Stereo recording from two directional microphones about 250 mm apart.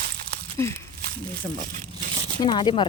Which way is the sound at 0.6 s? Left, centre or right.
Centre.